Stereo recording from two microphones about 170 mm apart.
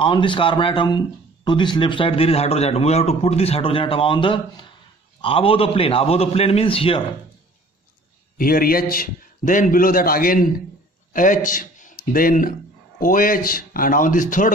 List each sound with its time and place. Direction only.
0.0 s speech: 30° left (ahead or behind)
8.4 s a man's voice: 60° left (ahead or behind)